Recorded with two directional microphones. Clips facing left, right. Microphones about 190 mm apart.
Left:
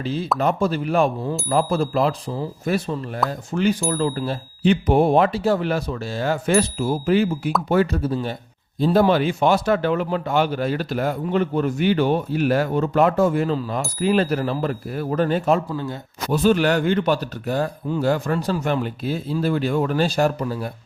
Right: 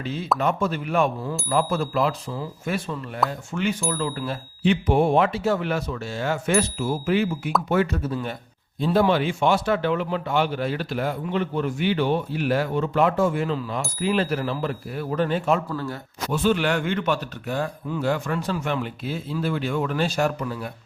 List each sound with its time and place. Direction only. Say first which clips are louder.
0.0 s a man's voice: left 3 dB; 35° left (ahead or behind)
15.7 s a man's voice: left 2 dB; 20° left (ahead or behind)
16.3 s a man's voice: left 4 dB; 40° left (ahead or behind)